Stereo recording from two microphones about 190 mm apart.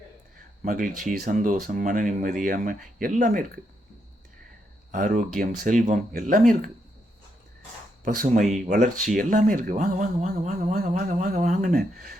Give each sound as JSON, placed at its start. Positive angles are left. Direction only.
{"t": 0.6, "sound": "speech", "side_deg": -45}
{"t": 4.9, "sound": "speech", "side_deg": -45}
{"t": 8.0, "sound": "speech", "side_deg": -45}